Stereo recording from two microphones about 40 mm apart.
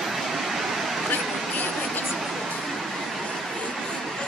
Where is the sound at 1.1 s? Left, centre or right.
Left.